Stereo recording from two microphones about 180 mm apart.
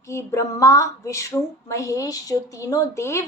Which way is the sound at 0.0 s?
15° left (ahead or behind).